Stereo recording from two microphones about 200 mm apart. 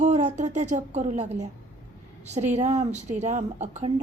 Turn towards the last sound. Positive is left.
turn(degrees=-35)  # may be behind; listen again after turning